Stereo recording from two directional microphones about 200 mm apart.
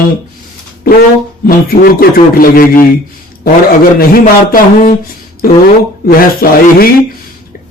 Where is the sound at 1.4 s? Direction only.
50° left (ahead or behind).